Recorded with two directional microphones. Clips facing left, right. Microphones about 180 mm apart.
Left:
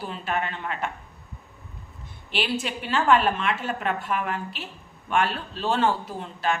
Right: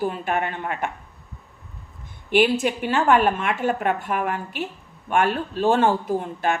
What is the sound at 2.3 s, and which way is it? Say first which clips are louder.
A woman's voice: right 9 dB; 50° right (ahead or behind).